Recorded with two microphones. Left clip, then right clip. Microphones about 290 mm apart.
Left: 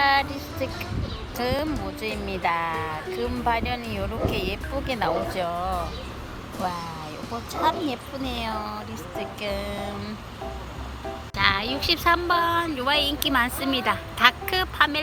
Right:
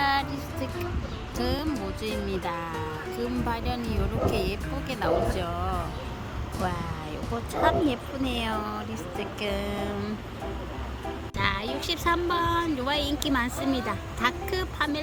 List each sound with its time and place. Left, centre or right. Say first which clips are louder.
0.0 s music: left 5 dB; centre
1.4 s a woman's voice: left 3 dB; centre
7.6 s a woman's voice: even; centre
11.3 s a woman's voice: left 6 dB; centre